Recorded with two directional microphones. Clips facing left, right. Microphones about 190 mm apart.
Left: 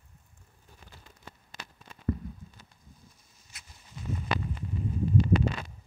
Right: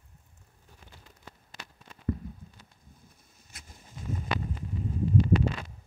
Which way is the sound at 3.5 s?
50° right (ahead or behind).